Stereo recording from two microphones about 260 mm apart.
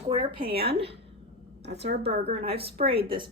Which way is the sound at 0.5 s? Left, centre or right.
Right.